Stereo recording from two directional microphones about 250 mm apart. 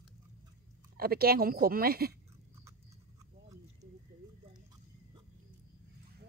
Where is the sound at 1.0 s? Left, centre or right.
Right.